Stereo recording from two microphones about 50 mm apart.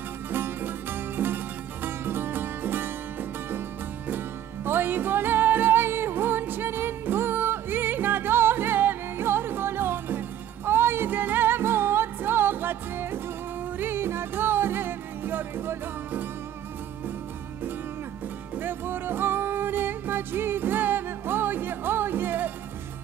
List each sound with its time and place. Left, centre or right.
0.3 s music: right
4.6 s music: right
11.1 s music: right
18.6 s music: right